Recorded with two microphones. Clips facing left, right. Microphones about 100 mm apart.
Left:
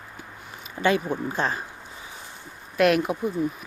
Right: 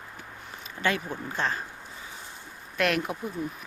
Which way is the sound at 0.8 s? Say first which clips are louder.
Left 6 dB; 15° left (ahead or behind).